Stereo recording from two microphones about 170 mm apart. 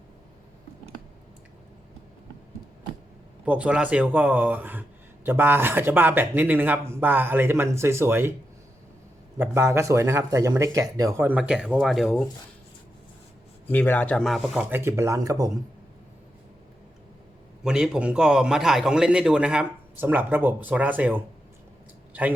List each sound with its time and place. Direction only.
3.4 s speech: 5° right (ahead or behind)
9.4 s speech: 15° right (ahead or behind)
13.7 s a man's voice: 10° left (ahead or behind); by 15.4 s 20° right (ahead or behind)
17.6 s a man's voice: 5° right (ahead or behind)